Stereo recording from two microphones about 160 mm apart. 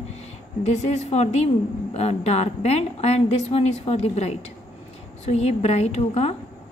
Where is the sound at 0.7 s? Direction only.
45° left (ahead or behind).